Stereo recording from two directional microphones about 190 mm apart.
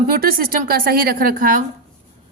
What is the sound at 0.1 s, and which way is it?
A woman's voice, 50° right (ahead or behind).